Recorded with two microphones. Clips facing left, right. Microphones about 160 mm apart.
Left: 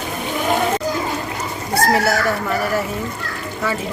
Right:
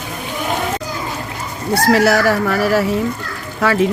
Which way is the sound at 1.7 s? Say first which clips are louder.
Right 4 dB; 90° right.